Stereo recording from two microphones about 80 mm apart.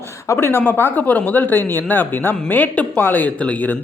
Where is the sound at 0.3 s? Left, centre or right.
Left.